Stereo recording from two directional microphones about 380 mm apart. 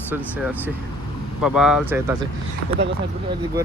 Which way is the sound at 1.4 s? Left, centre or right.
Centre.